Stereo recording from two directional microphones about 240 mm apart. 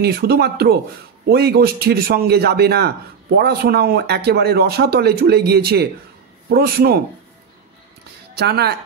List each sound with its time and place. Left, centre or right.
0.0 s a man's voice: right
8.4 s speech: right